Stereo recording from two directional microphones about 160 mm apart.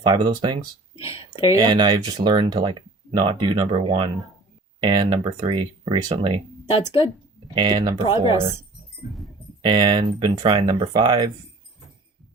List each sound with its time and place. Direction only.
0.0 s speech: 30° right (ahead or behind)
0.9 s speech: 35° left (ahead or behind)
1.5 s speech: 25° right (ahead or behind)
6.7 s speech: 35° left (ahead or behind)
7.5 s speech: 25° right (ahead or behind)
9.6 s speech: 30° right (ahead or behind)